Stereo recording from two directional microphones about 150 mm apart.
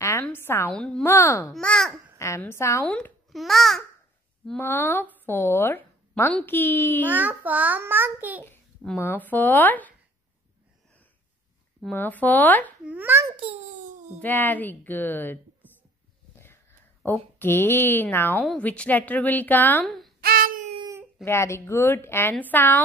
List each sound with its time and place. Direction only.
0.0 s a sound: 15° left (ahead or behind)
1.0 s speech: 20° left (ahead or behind)
1.5 s a child's voice: 5° left (ahead or behind)
2.1 s a child's voice: 20° left (ahead or behind); by 3.8 s centre (ahead or behind)
4.5 s a woman's voice: 15° left (ahead or behind)
7.1 s a child's voice: 10° right (ahead or behind)
8.5 s speech: 15° left (ahead or behind)
11.9 s a woman's voice: 10° left (ahead or behind)
12.8 s a child's voice: 10° right (ahead or behind)
14.2 s a woman's voice: 10° left (ahead or behind)
17.4 s a woman's voice: 15° left (ahead or behind)
19.8 s speech: centre (ahead or behind)
20.2 s baby cry: 80° right
21.2 s a woman's voice: 20° left (ahead or behind)